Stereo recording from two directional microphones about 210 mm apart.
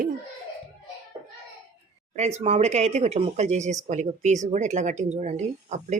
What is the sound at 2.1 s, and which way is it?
Speech, 30° right (ahead or behind).